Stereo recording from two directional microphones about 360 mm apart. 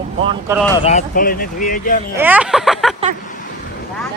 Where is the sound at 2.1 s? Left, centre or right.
Centre.